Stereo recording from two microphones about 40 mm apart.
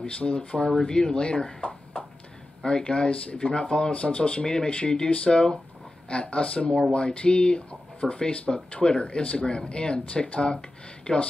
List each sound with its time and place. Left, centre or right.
0.0 s speech: left
3.9 s speech: left
11.1 s speech: left